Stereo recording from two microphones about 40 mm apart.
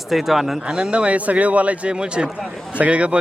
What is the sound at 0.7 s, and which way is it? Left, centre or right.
A man's voice, right.